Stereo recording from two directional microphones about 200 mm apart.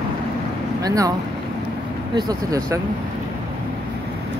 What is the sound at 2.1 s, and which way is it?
Speech, 15° right (ahead or behind).